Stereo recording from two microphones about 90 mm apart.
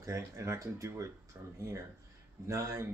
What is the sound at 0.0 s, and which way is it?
Speech, 35° right (ahead or behind).